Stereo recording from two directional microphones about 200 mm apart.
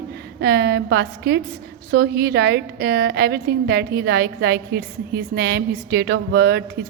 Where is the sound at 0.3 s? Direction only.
55° right (ahead or behind).